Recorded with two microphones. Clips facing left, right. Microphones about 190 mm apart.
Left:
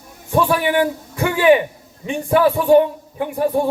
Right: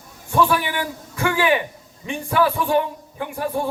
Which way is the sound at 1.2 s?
20° left (ahead or behind).